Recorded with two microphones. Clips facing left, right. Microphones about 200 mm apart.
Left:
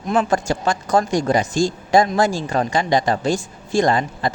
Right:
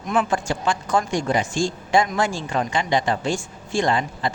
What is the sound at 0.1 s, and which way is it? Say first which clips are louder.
Speech: left 3 dB; 40° left (ahead or behind).